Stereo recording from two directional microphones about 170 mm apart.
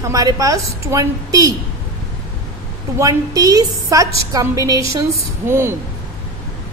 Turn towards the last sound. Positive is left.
turn(degrees=-15)  # may be behind; listen again after turning